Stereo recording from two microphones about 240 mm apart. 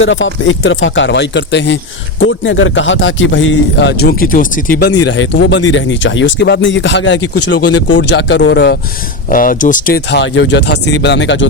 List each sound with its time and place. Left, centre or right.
0.0 s speech: left